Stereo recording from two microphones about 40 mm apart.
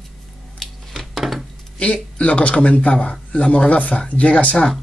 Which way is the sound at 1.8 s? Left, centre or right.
Left.